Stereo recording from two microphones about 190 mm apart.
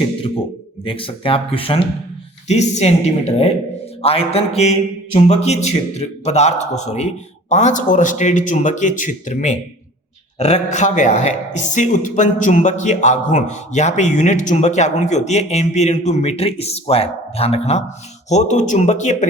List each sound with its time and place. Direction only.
0.9 s a man's voice: 30° left (ahead or behind)